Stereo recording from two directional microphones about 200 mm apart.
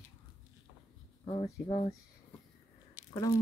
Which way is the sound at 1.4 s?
20° left (ahead or behind).